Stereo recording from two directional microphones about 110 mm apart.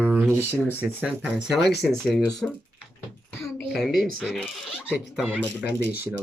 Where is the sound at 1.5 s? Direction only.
Centre (ahead or behind).